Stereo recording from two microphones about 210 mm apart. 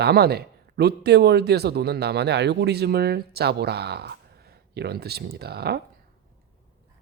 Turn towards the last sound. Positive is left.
turn(degrees=-50)  # may be behind; listen again after turning